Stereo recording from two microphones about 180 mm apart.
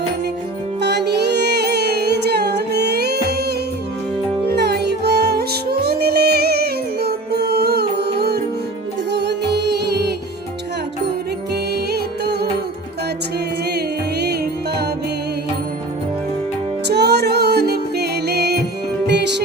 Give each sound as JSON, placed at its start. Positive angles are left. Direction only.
{"t": 0.8, "sound": "music", "side_deg": -70}
{"t": 11.7, "sound": "music", "side_deg": -65}
{"t": 13.7, "sound": "music", "side_deg": -65}
{"t": 16.8, "sound": "music", "side_deg": -65}